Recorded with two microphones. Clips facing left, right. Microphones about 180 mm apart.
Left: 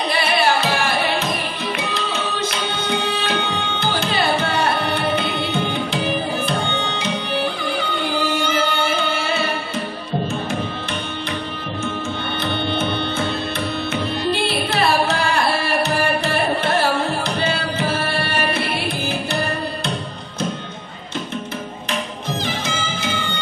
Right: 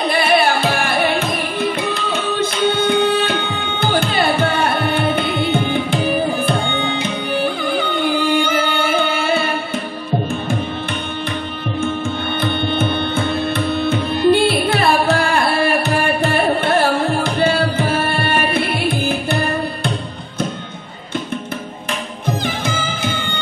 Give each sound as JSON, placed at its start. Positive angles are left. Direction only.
{"t": 0.1, "sound": "music", "side_deg": -55}
{"t": 12.4, "sound": "music", "side_deg": -55}
{"t": 13.8, "sound": "carnatic music", "side_deg": -55}
{"t": 17.2, "sound": "tabla", "side_deg": -55}
{"t": 22.7, "sound": "music", "side_deg": -55}